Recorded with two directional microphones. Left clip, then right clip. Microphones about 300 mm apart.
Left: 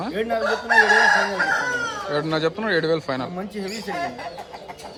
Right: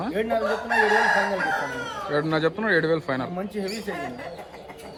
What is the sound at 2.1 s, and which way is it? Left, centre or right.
Speech, centre.